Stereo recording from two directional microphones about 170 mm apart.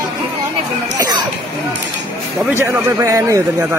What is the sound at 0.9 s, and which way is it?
Cough, 25° right (ahead or behind).